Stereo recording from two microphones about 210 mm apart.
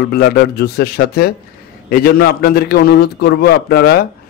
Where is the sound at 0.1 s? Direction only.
45° left (ahead or behind).